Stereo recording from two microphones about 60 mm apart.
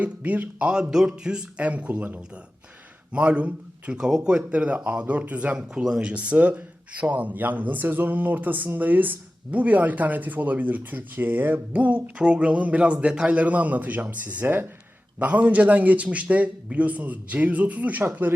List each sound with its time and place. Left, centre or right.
0.0 s a man's voice: right
5.5 s speech: centre; by 18.3 s right